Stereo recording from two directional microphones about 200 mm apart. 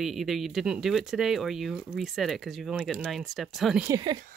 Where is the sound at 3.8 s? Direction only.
20° right (ahead or behind).